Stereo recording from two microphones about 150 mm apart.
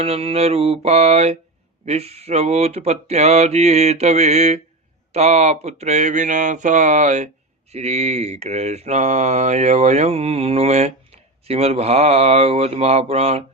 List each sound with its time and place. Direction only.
0.0 s mantra: 40° right (ahead or behind)